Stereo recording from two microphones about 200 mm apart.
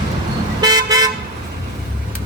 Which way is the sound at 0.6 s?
20° right (ahead or behind).